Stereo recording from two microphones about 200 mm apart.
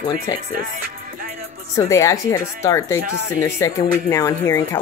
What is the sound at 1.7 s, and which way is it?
Speech, 15° left (ahead or behind).